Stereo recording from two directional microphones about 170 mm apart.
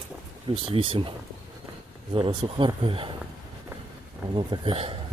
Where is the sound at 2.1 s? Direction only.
30° right (ahead or behind).